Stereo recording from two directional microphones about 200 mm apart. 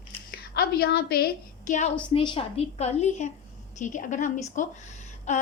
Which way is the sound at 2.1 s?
25° left (ahead or behind).